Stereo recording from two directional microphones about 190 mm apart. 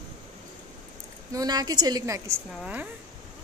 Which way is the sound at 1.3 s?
20° right (ahead or behind).